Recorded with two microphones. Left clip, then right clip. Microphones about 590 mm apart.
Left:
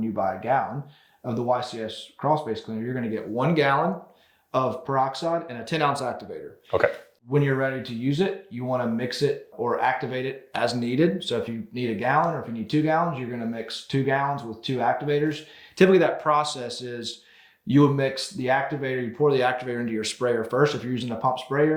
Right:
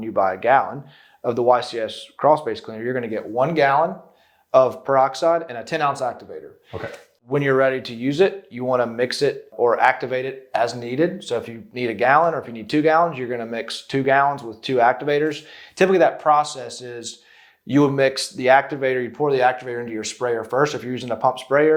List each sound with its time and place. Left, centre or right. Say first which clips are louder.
0.2 s speech: right 7 dB; right
3.4 s speech: right 5 dB; right
7.3 s speech: right 6 dB; right
15.8 s speech: right 3 dB; right
17.7 s speech: right 4 dB; right